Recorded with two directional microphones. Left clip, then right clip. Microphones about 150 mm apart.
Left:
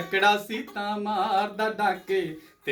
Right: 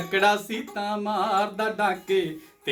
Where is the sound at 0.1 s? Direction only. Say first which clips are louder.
Even; 15° right (ahead or behind).